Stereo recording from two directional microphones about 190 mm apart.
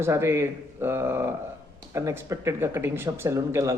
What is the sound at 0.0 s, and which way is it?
Speech, 15° right (ahead or behind).